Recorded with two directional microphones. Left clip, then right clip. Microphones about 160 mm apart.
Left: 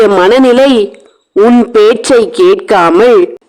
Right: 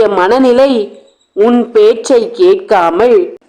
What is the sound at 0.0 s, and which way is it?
A man's voice, 60° left (ahead or behind).